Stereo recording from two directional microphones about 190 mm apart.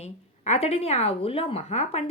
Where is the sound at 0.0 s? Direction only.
35° left (ahead or behind).